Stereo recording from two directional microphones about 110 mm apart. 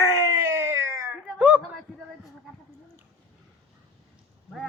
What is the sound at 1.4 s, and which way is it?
Speech, 10° right (ahead or behind).